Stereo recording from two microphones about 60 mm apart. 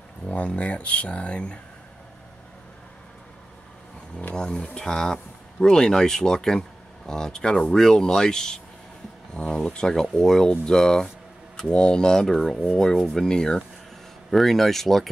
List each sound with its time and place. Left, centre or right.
0.3 s speech: left
4.4 s speech: centre